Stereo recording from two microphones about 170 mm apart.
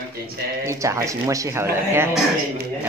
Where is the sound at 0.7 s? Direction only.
15° right (ahead or behind).